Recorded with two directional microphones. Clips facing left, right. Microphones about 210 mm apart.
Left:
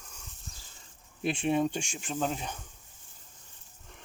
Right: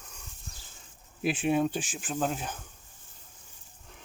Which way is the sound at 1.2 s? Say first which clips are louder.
Right 1 dB; 5° right (ahead or behind).